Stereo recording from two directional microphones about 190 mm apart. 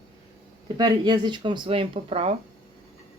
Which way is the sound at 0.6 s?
20° right (ahead or behind).